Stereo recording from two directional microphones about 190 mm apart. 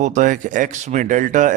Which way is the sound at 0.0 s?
40° right (ahead or behind).